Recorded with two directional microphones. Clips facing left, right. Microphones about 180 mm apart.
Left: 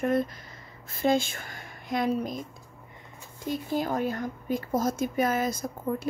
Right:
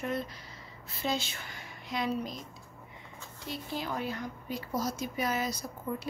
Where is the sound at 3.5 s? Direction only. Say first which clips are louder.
Left 8 dB; 45° left (ahead or behind).